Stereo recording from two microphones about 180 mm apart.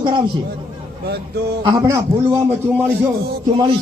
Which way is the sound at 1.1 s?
65° right (ahead or behind).